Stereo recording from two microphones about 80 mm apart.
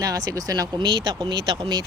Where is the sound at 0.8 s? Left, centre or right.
Right.